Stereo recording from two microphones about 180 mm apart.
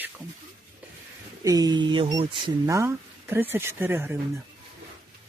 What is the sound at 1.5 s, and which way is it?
Speech, 20° right (ahead or behind).